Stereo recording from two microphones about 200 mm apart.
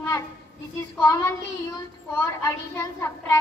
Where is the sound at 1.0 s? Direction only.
15° left (ahead or behind).